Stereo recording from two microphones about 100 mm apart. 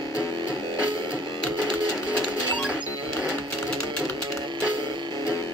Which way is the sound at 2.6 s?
10° right (ahead or behind).